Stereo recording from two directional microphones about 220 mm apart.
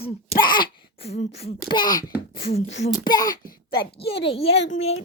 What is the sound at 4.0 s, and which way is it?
Speech, 25° left (ahead or behind).